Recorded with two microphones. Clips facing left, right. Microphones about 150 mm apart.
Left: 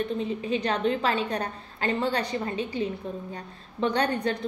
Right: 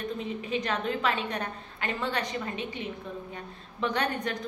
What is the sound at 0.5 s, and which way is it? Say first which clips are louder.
A woman's voice: left 4 dB; 30° left (ahead or behind).